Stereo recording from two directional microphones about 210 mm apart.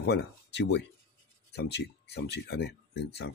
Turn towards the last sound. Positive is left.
turn(degrees=50)  # may be behind; listen again after turning